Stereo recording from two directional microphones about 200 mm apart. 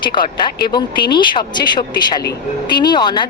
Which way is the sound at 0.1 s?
20° left (ahead or behind).